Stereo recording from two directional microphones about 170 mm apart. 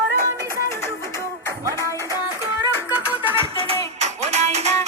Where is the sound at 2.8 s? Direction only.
10° right (ahead or behind).